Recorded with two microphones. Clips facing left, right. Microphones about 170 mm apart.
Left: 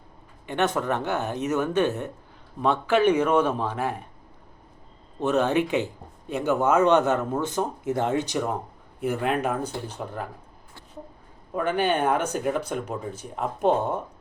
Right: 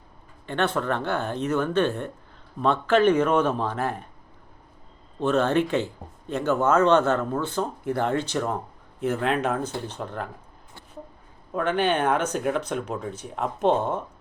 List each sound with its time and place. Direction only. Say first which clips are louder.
0.4 s speech: even; 15° left (ahead or behind)
5.2 s speech: right 1 dB; 15° left (ahead or behind)
11.5 s speech: even; 10° left (ahead or behind)